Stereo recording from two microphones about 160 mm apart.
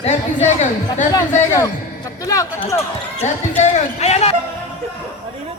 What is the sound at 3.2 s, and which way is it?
Speech, 45° left (ahead or behind).